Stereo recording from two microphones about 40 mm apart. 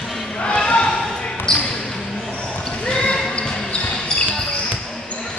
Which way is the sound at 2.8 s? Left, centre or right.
Left.